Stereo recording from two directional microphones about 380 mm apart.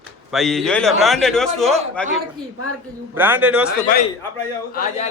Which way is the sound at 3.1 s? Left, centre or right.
Centre.